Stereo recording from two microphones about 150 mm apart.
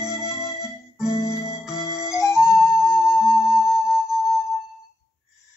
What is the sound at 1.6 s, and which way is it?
Flute, 5° right (ahead or behind).